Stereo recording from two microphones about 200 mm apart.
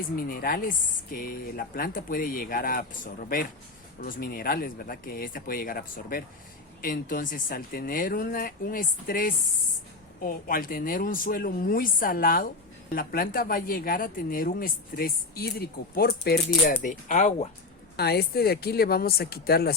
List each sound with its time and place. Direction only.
0.2 s speech: 45° left (ahead or behind)
17.9 s speech: 55° left (ahead or behind)